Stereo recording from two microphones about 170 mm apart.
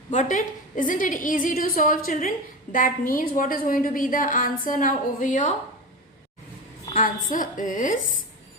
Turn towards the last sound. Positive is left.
turn(degrees=50)  # may be behind; listen again after turning